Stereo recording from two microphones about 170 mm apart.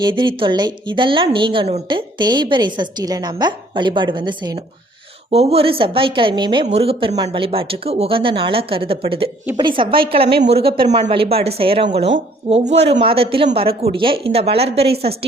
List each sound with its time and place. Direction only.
0.0 s a woman's voice: 25° right (ahead or behind)
5.3 s a woman's voice: 35° right (ahead or behind)
10.2 s a woman's voice: 90° right
10.5 s speech: 35° right (ahead or behind)